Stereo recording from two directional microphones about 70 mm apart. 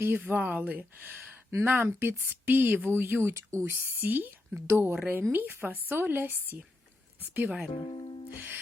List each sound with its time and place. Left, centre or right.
0.0 s speech: right
3.8 s speech: right